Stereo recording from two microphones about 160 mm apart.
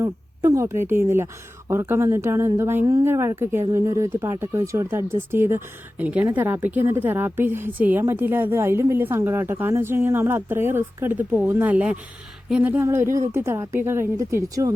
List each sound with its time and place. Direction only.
0.0 s a woman's voice: 20° right (ahead or behind)